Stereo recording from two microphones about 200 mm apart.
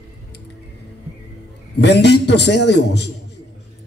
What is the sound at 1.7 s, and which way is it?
A man's voice, 60° left (ahead or behind).